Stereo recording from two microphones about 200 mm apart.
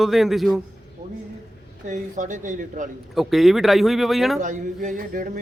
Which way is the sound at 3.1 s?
Centre (ahead or behind).